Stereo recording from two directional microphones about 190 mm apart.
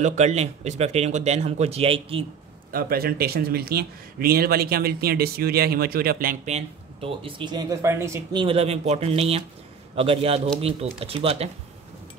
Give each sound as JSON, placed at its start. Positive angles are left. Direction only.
{"t": 0.0, "sound": "speech", "side_deg": -35}
{"t": 2.7, "sound": "speech", "side_deg": -50}
{"t": 6.5, "sound": "speech", "side_deg": -30}